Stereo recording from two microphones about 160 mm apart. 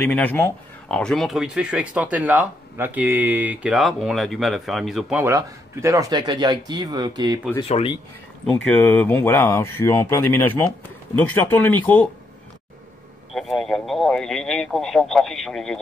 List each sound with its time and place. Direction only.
0.0 s speech: 10° left (ahead or behind)
5.2 s speech: 20° right (ahead or behind)
7.6 s speech: 35° left (ahead or behind)
8.6 s speech: 10° left (ahead or behind)
13.3 s speech: centre (ahead or behind)